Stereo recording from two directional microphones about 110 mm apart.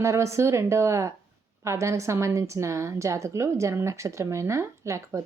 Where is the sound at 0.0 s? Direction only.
25° right (ahead or behind).